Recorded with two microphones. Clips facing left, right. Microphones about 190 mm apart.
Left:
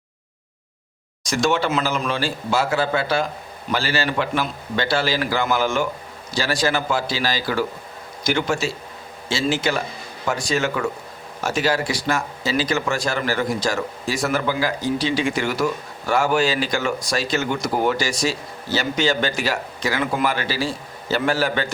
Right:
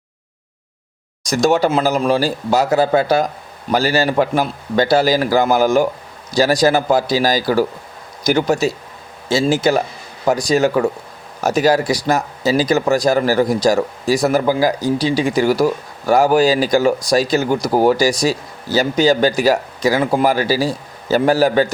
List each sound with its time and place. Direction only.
1.2 s speech: 40° right (ahead or behind)